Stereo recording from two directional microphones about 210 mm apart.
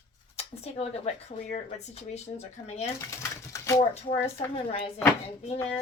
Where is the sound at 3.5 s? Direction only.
15° left (ahead or behind).